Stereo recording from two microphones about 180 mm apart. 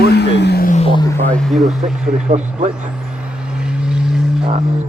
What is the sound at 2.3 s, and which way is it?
Speech, 45° right (ahead or behind).